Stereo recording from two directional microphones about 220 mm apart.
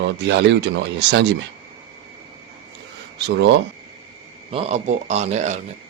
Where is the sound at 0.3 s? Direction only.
55° right (ahead or behind).